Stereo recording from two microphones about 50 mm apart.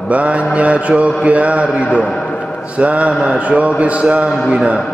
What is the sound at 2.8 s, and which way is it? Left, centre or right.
A man's voice, right.